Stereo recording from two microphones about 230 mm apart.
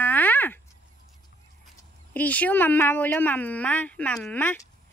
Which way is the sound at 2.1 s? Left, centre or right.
Centre.